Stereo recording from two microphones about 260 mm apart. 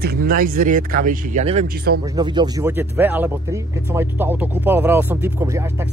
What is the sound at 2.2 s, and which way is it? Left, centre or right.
Speech, centre.